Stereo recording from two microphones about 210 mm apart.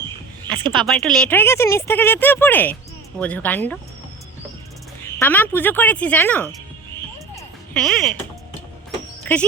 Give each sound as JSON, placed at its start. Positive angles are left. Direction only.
{"t": 0.4, "sound": "speech", "side_deg": -20}
{"t": 0.9, "sound": "speech", "side_deg": 0}
{"t": 5.2, "sound": "speech", "side_deg": 10}
{"t": 7.3, "sound": "music", "side_deg": 5}